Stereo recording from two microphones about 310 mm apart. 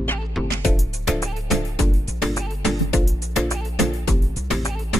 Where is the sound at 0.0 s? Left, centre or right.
Centre.